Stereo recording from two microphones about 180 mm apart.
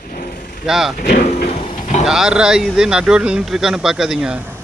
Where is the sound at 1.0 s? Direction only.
50° left (ahead or behind).